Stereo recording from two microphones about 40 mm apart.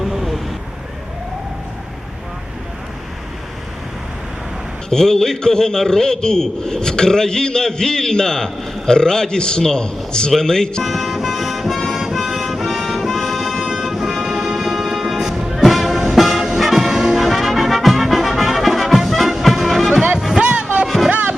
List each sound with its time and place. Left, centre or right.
0.0 s vehicle: centre
4.9 s a man's voice: centre
10.8 s music: centre
16.6 s brass instrument: centre
20.1 s music: centre
20.8 s music: centre
21.1 s music: right